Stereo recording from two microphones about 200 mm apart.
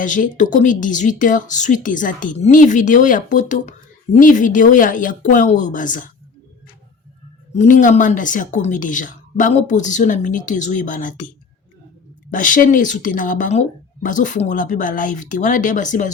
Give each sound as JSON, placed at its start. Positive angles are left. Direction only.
{"t": 0.0, "sound": "speech", "side_deg": 40}
{"t": 7.5, "sound": "speech", "side_deg": 40}
{"t": 12.3, "sound": "speech", "side_deg": 40}